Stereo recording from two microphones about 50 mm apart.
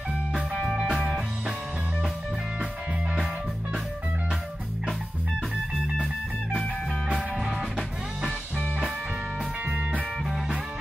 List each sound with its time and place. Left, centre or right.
0.4 s music: centre
7.3 s music: centre
9.4 s music: right